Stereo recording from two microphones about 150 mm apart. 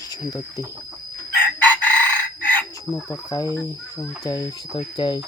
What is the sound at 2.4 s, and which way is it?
Chicken, 10° left (ahead or behind).